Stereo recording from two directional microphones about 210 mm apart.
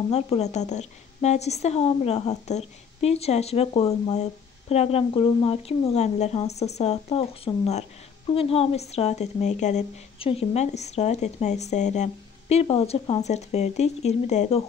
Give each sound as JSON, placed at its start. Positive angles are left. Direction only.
{"t": 0.1, "sound": "a woman's voice", "side_deg": 30}